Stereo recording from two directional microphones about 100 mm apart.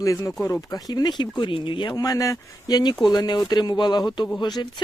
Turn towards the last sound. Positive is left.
turn(degrees=45)  # may be behind; listen again after turning